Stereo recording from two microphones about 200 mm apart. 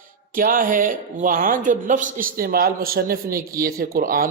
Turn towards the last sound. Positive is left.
turn(degrees=-45)  # may be behind; listen again after turning